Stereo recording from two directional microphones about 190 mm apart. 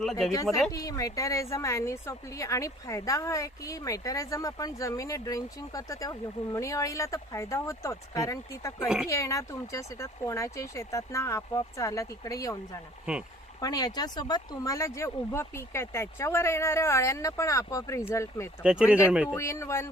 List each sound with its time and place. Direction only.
0.0 s speech: centre (ahead or behind)
0.7 s a woman's voice: 20° left (ahead or behind)
13.6 s a woman's voice: 20° left (ahead or behind)
18.6 s speech: 5° right (ahead or behind)
19.3 s a woman's voice: 15° left (ahead or behind)